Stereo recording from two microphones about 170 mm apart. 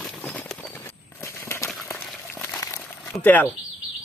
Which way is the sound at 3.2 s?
10° left (ahead or behind).